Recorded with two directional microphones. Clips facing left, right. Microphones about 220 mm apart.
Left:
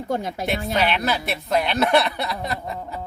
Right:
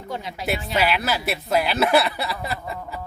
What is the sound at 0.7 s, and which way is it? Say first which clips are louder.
Speech: even; 5° right (ahead or behind).